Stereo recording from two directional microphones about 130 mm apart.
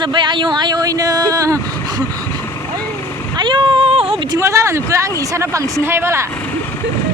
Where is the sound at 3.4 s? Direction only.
40° right (ahead or behind).